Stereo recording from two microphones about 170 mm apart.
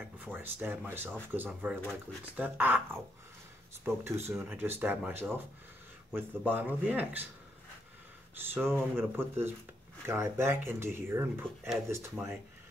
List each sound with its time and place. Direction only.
0.2 s speech: 10° right (ahead or behind)
8.4 s speech: 15° right (ahead or behind)